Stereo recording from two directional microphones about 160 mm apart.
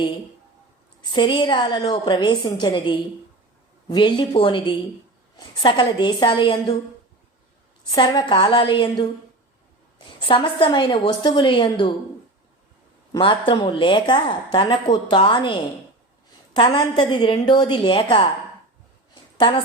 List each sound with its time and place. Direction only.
1.1 s a woman's voice: 30° left (ahead or behind)
7.9 s a woman's voice: 30° left (ahead or behind)
10.2 s a woman's voice: 30° left (ahead or behind)
13.1 s a woman's voice: 30° left (ahead or behind)
16.6 s a woman's voice: 30° left (ahead or behind)
19.4 s a woman's voice: 30° left (ahead or behind)